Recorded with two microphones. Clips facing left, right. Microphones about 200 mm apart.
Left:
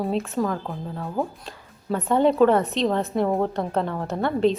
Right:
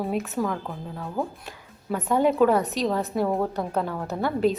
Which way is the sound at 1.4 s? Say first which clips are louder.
Left 3 dB; 5° right (ahead or behind).